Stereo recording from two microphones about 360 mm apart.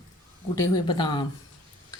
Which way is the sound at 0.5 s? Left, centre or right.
Centre.